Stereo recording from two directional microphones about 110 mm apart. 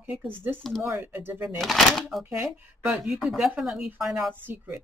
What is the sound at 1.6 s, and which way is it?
Speech, centre (ahead or behind).